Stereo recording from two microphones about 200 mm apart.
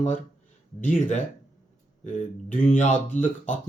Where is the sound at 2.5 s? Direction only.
40° left (ahead or behind).